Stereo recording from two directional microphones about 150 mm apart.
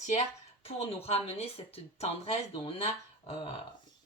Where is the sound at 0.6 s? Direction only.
40° left (ahead or behind).